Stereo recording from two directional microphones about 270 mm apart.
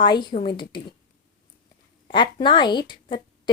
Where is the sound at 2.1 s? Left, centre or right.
Centre.